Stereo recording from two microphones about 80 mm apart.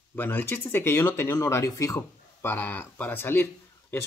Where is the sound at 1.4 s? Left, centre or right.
Left.